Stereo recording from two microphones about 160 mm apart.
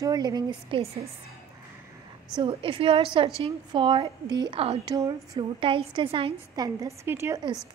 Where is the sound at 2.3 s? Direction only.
35° right (ahead or behind).